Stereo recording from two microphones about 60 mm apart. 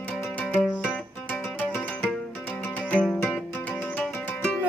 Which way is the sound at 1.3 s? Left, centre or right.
Left.